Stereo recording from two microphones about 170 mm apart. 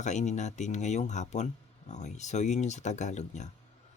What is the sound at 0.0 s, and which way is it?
Speech, 45° left (ahead or behind).